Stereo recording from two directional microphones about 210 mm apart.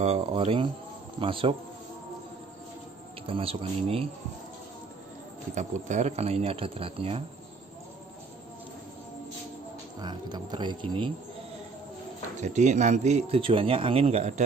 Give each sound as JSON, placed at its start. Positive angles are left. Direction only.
{"t": 0.0, "sound": "speech", "side_deg": -30}
{"t": 3.3, "sound": "speech", "side_deg": -25}
{"t": 5.5, "sound": "speech", "side_deg": -35}
{"t": 9.9, "sound": "speech", "side_deg": -20}
{"t": 12.4, "sound": "speech", "side_deg": -35}